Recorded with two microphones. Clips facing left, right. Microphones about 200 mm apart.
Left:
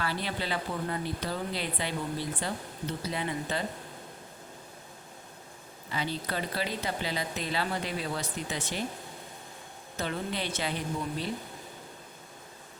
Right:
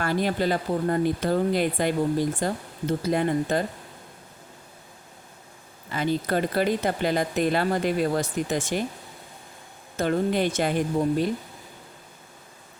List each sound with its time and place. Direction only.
0.0 s speech: 50° right (ahead or behind)
5.9 s speech: 50° right (ahead or behind)
10.0 s speech: 50° right (ahead or behind)